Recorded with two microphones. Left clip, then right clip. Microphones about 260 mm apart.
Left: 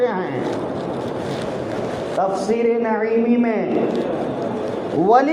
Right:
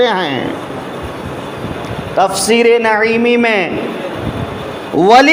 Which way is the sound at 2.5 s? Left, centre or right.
Right.